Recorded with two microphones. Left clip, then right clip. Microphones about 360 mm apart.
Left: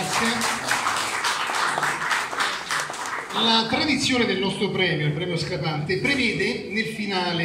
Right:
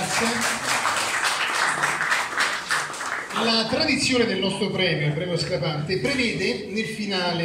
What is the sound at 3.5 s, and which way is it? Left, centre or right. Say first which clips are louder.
A man's voice: even; centre.